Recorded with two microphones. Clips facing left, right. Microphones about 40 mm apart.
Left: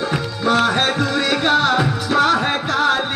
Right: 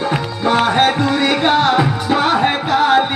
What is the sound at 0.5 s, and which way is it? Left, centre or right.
Music, centre.